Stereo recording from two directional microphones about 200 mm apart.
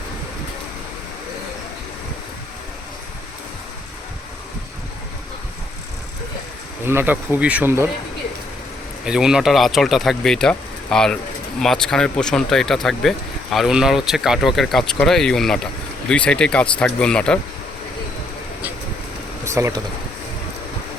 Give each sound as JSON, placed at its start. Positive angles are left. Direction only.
{"t": 6.8, "sound": "speech", "side_deg": -10}
{"t": 9.0, "sound": "speech", "side_deg": -5}
{"t": 19.5, "sound": "speech", "side_deg": -15}